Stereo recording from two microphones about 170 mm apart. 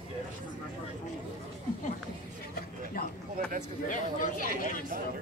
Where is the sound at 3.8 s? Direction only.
50° left (ahead or behind).